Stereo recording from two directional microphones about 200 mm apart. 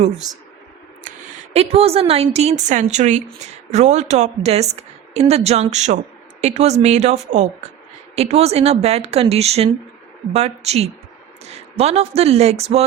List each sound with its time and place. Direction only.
1.5 s a woman's voice: 30° right (ahead or behind)